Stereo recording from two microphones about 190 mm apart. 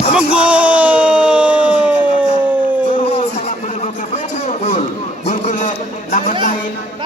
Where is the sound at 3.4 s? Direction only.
35° left (ahead or behind).